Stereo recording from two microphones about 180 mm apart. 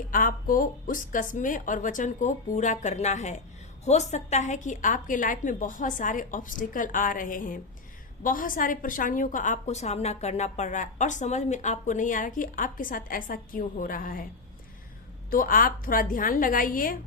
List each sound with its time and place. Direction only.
0.1 s a woman's voice: 50° left (ahead or behind)
15.3 s a woman's voice: 50° left (ahead or behind)